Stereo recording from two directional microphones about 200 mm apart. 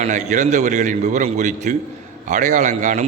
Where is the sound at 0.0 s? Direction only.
35° right (ahead or behind).